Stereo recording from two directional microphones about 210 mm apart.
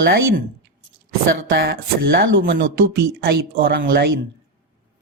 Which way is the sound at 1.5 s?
50° right (ahead or behind).